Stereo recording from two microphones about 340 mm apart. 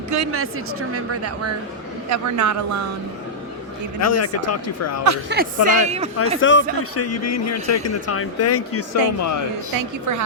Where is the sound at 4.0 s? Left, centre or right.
Left.